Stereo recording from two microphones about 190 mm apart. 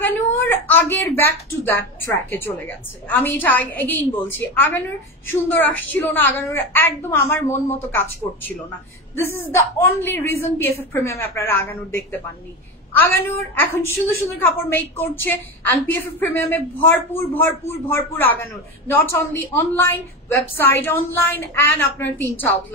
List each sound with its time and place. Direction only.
0.0 s a man's voice: 10° left (ahead or behind)